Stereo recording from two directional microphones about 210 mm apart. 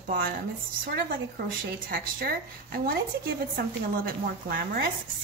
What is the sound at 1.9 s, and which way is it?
Speech, 45° right (ahead or behind).